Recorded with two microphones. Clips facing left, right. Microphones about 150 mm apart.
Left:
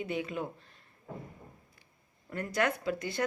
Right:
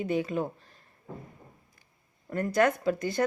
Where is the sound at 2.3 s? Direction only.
45° right (ahead or behind).